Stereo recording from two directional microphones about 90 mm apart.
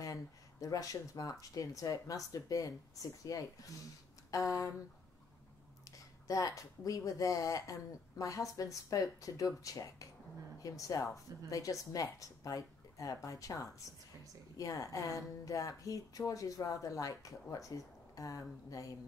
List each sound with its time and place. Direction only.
0.0 s a woman's voice: 40° left (ahead or behind)
5.9 s a woman's voice: 40° left (ahead or behind)